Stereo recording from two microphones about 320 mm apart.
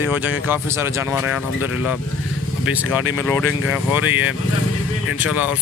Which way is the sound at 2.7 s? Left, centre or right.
Centre.